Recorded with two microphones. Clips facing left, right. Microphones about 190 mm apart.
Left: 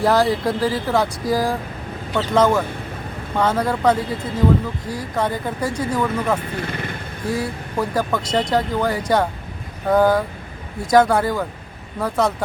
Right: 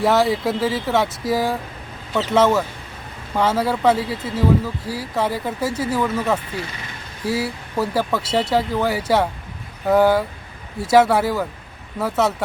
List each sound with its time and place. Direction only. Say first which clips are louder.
0.0 s speech: even; centre (ahead or behind)
6.6 s speech: left 5 dB; 55° left (ahead or behind)
7.3 s speech: right 1 dB; 5° right (ahead or behind)